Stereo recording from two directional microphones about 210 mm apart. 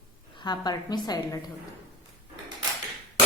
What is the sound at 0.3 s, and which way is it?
A woman's voice, 20° left (ahead or behind).